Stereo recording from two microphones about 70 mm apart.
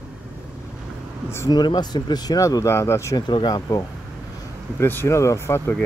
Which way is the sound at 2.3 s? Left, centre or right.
Left.